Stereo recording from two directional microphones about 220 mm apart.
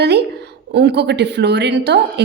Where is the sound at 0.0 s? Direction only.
50° right (ahead or behind).